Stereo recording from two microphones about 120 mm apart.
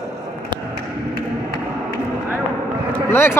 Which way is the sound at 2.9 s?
20° left (ahead or behind).